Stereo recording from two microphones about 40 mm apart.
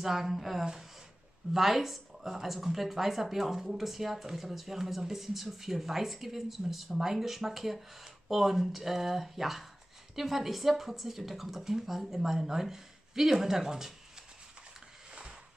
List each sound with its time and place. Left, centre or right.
0.0 s speech: centre